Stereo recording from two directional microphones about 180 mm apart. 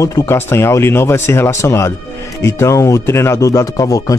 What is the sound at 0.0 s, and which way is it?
Speech, 15° left (ahead or behind).